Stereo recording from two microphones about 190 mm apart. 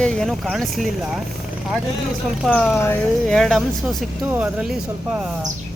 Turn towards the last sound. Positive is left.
turn(degrees=-5)  # may be behind; listen again after turning